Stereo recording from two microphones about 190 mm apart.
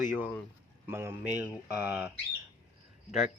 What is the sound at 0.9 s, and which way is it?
Speech, 15° right (ahead or behind).